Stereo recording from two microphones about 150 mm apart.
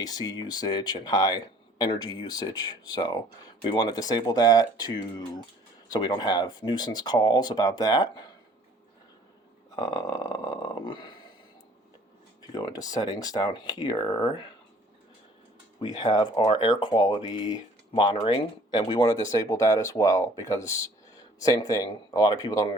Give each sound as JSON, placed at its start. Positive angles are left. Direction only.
{"t": 0.0, "sound": "speech", "side_deg": 25}
{"t": 5.9, "sound": "speech", "side_deg": 30}
{"t": 9.7, "sound": "speech", "side_deg": 25}
{"t": 10.6, "sound": "a sound", "side_deg": 35}
{"t": 12.5, "sound": "speech", "side_deg": 25}
{"t": 15.8, "sound": "speech", "side_deg": 30}